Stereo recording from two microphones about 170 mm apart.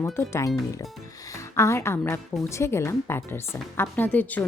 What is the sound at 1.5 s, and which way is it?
Speech, 15° left (ahead or behind).